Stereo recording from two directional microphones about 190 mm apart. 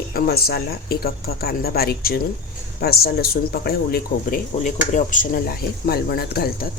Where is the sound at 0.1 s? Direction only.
55° left (ahead or behind).